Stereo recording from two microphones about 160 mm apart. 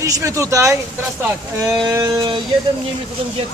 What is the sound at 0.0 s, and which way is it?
Speech, 20° right (ahead or behind).